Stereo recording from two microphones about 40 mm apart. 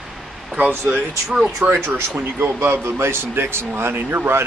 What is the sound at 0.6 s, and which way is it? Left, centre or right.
Speech, right.